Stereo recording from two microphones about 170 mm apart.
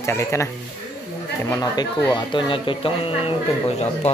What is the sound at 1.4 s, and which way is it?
Speech, 20° left (ahead or behind).